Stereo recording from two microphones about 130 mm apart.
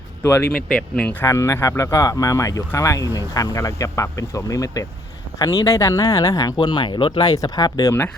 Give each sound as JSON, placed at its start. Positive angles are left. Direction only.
{"t": 0.2, "sound": "speech", "side_deg": 20}
{"t": 0.5, "sound": "speech", "side_deg": 5}
{"t": 1.2, "sound": "speech", "side_deg": 20}